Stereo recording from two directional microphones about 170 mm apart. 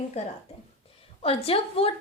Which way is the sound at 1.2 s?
35° left (ahead or behind).